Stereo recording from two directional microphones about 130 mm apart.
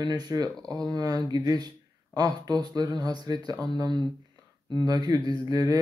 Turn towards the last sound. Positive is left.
turn(degrees=-30)  # may be behind; listen again after turning